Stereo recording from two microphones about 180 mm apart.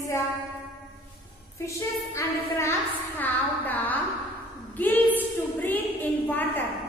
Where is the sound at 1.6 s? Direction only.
15° left (ahead or behind).